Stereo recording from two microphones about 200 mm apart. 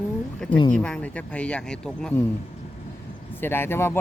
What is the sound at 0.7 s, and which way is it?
Speech, 5° left (ahead or behind).